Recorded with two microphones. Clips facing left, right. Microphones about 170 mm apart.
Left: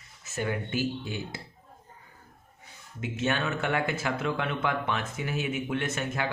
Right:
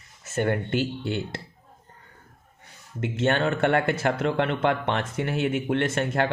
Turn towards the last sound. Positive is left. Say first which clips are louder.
# right 7 dB
turn(degrees=-55)  # may be behind; listen again after turning